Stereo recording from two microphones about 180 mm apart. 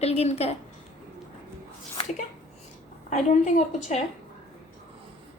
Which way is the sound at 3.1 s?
40° left (ahead or behind).